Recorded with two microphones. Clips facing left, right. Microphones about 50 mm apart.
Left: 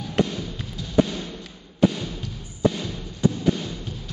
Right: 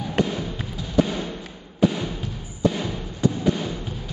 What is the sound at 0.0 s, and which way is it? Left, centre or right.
Music, centre.